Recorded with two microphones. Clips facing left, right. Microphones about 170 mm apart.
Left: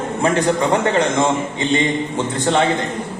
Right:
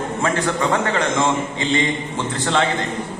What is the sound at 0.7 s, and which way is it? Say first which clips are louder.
A man's voice: left 3 dB; 20° left (ahead or behind).